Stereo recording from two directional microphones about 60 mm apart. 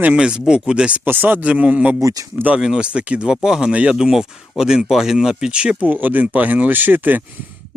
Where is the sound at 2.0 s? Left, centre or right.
Right.